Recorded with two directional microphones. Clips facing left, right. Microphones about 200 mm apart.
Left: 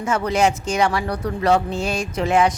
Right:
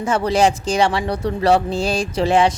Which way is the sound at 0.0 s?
30° right (ahead or behind).